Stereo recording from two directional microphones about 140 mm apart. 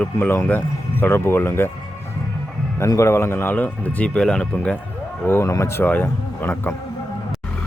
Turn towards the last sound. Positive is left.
turn(degrees=10)  # may be behind; listen again after turning